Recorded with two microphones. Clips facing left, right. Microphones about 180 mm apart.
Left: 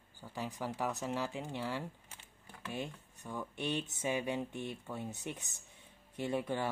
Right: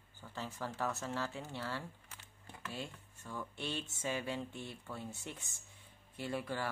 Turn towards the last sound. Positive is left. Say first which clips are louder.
# left 4 dB
turn(degrees=20)  # may be behind; listen again after turning